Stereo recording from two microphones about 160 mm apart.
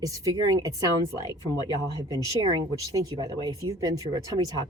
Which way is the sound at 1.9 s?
25° right (ahead or behind).